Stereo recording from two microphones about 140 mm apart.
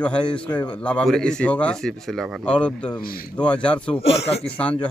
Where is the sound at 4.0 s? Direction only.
45° left (ahead or behind).